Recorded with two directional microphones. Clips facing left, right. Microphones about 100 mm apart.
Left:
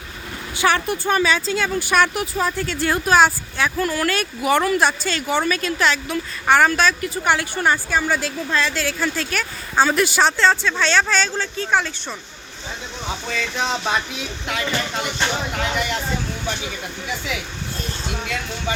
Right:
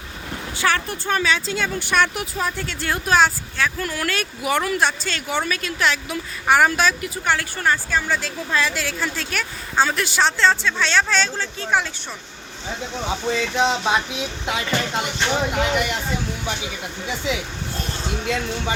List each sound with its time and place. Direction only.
0.5 s speech: 15° left (ahead or behind); by 7.1 s 15° right (ahead or behind)
7.3 s a woman's voice: 20° left (ahead or behind)
8.4 s speech: 5° right (ahead or behind)
13.2 s speech: 20° right (ahead or behind)
15.5 s speech: 10° right (ahead or behind)
17.1 s speech: 25° right (ahead or behind)